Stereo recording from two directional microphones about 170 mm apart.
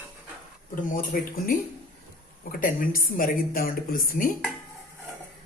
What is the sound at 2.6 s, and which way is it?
Speech, 55° left (ahead or behind).